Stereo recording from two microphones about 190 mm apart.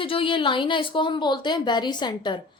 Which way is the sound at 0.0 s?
25° left (ahead or behind).